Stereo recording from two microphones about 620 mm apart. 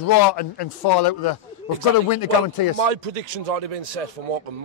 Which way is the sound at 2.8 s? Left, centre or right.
Right.